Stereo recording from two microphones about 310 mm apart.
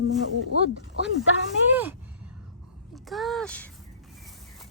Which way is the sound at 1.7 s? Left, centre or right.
Centre.